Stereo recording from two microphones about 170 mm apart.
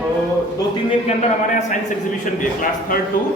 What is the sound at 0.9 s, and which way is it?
Speech, 40° left (ahead or behind).